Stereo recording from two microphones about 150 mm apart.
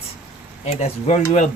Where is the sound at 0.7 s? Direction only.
45° left (ahead or behind).